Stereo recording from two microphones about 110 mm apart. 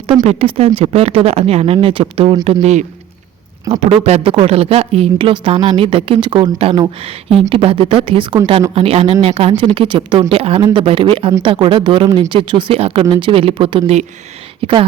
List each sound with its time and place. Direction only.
0.1 s a woman's voice: 60° right (ahead or behind)
2.4 s speech: 70° right (ahead or behind)
3.7 s a woman's voice: 70° right (ahead or behind); by 8.4 s 50° right (ahead or behind)
8.7 s a woman's voice: 65° right (ahead or behind)